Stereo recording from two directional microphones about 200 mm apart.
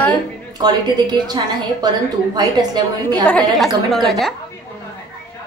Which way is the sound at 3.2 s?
5° left (ahead or behind).